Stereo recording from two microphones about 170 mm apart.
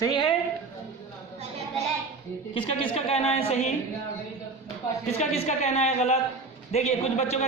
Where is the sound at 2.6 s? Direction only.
30° left (ahead or behind).